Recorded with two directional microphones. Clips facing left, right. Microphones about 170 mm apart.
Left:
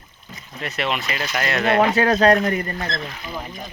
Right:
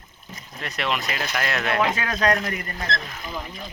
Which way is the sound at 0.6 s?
Centre (ahead or behind).